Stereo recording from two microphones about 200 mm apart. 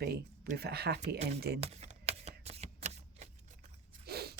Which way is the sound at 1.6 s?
30° right (ahead or behind).